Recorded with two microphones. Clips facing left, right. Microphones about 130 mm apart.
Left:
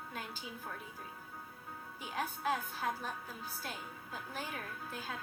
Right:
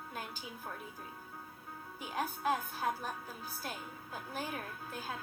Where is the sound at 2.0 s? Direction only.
40° right (ahead or behind).